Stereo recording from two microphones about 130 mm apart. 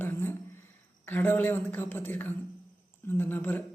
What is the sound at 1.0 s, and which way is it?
A woman's voice, 15° left (ahead or behind).